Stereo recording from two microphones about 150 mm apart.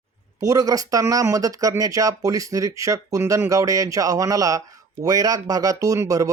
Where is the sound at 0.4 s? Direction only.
25° right (ahead or behind).